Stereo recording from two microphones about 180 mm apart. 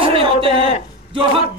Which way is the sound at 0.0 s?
30° right (ahead or behind).